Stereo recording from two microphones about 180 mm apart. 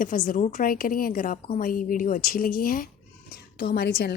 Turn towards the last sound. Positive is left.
turn(degrees=65)  # may be behind; listen again after turning